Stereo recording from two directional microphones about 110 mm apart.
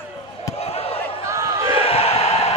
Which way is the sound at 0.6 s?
65° left (ahead or behind).